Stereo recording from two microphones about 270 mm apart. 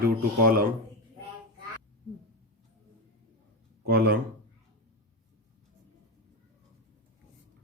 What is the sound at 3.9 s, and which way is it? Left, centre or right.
Speech, right.